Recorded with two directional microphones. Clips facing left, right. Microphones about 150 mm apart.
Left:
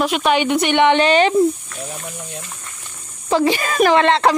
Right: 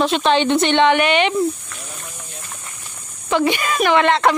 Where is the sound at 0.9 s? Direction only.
35° left (ahead or behind).